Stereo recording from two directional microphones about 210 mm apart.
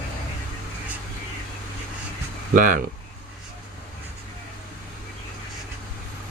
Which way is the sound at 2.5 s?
40° right (ahead or behind).